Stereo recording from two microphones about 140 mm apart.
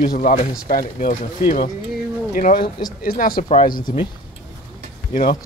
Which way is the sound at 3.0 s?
90° left.